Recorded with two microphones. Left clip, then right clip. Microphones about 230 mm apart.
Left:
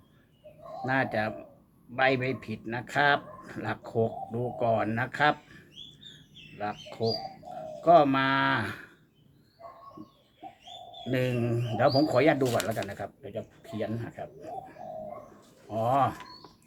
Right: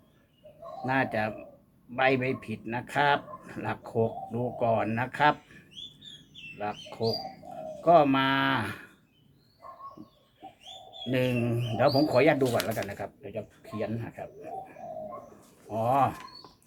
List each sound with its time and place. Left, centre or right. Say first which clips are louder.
0.9 s speech: even; centre
11.0 s speech: right 1 dB; centre